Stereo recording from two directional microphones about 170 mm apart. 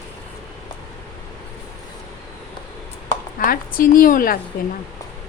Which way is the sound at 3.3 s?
55° left (ahead or behind).